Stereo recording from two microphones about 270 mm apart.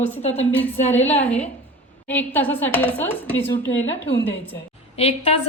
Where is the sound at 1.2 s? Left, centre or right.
Centre.